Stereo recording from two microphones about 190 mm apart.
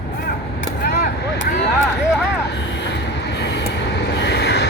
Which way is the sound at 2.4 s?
65° left (ahead or behind).